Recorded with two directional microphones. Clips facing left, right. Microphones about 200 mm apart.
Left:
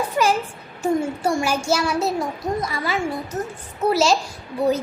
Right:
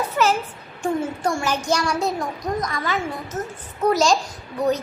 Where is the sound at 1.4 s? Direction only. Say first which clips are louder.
Left 2 dB; 10° left (ahead or behind).